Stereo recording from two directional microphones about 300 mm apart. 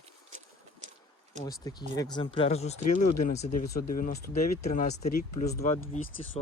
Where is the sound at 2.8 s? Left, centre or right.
Left.